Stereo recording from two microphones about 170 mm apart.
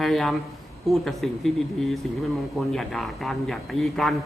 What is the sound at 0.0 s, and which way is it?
A man's voice, centre (ahead or behind).